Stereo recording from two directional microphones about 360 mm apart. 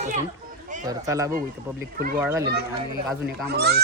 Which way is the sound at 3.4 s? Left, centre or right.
Right.